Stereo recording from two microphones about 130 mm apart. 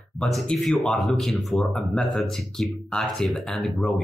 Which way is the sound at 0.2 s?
5° left (ahead or behind).